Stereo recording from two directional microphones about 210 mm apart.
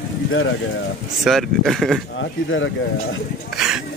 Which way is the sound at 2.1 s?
65° left (ahead or behind).